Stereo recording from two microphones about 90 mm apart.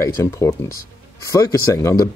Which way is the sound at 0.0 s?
35° left (ahead or behind).